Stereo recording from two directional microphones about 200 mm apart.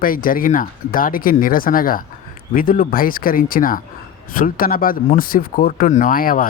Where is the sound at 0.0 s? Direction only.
45° left (ahead or behind).